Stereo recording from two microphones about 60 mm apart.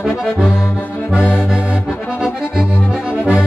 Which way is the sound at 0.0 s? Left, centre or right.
Centre.